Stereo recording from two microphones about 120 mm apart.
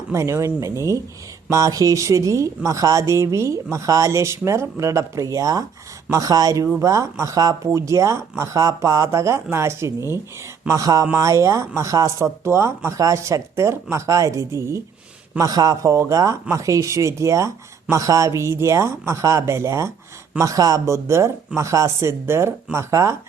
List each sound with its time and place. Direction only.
0.1 s speech: 25° right (ahead or behind)